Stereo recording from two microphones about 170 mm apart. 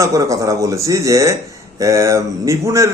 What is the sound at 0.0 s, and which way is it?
A man's voice, 20° right (ahead or behind).